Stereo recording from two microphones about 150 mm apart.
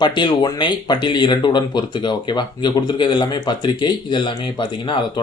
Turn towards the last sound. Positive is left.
turn(degrees=30)  # may be behind; listen again after turning